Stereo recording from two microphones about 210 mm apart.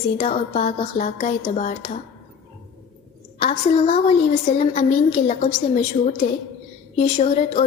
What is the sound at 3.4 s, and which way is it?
A woman's voice, 30° left (ahead or behind).